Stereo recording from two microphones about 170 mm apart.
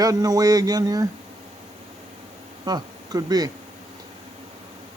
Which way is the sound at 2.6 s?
25° right (ahead or behind).